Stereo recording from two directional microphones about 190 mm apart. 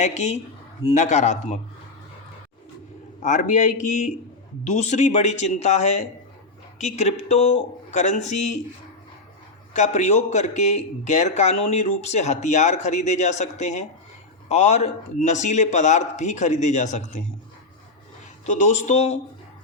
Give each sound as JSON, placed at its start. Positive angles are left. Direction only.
{"t": 0.0, "sound": "speech", "side_deg": 35}
{"t": 3.2, "sound": "speech", "side_deg": 40}
{"t": 9.7, "sound": "speech", "side_deg": 40}
{"t": 18.4, "sound": "speech", "side_deg": 40}